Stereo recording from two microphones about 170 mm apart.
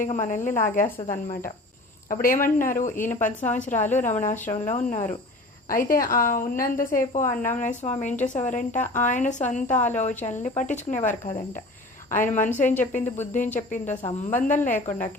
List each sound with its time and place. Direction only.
0.0 s a woman's voice: 50° left (ahead or behind)
2.2 s a woman's voice: 55° left (ahead or behind)
5.6 s a woman's voice: 55° left (ahead or behind)
12.1 s a woman's voice: 50° left (ahead or behind)
12.6 s speech: 10° left (ahead or behind)
13.3 s a woman's voice: 45° left (ahead or behind)